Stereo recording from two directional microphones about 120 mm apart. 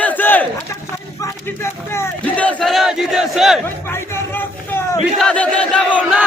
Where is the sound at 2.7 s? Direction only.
Centre (ahead or behind).